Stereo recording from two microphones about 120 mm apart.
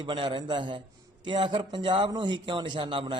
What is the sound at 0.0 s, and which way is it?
A man's voice, 40° right (ahead or behind).